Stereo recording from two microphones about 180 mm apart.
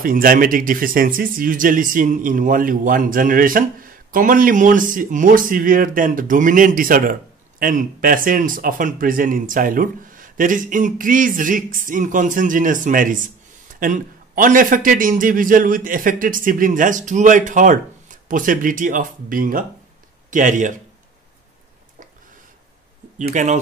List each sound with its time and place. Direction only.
0.0 s speech: 50° right (ahead or behind)
23.3 s speech: 40° right (ahead or behind)